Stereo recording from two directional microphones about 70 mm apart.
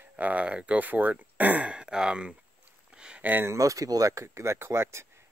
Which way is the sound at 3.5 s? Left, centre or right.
Right.